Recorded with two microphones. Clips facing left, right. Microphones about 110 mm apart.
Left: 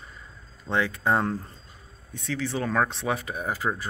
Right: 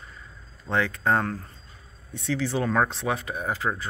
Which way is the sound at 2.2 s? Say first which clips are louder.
Right 3 dB; 5° right (ahead or behind).